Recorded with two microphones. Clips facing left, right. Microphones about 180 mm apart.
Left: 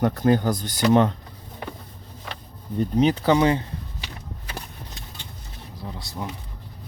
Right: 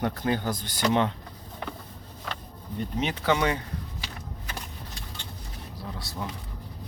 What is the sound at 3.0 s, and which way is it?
Speech, 35° left (ahead or behind).